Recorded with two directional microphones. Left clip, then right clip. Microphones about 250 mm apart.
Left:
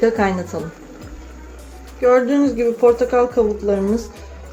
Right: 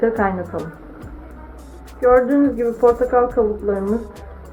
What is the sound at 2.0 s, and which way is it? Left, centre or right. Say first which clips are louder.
A woman's voice: even; left.